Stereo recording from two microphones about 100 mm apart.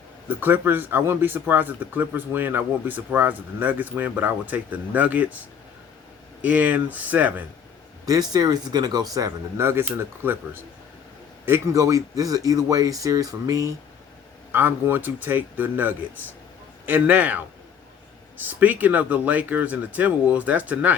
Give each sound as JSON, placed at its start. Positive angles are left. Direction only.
{"t": 0.3, "sound": "speech", "side_deg": -20}
{"t": 6.4, "sound": "speech", "side_deg": -15}
{"t": 8.0, "sound": "speech", "side_deg": -40}
{"t": 9.6, "sound": "speech", "side_deg": -25}
{"t": 11.8, "sound": "speech", "side_deg": -35}
{"t": 14.5, "sound": "speech", "side_deg": -20}
{"t": 18.4, "sound": "speech", "side_deg": -15}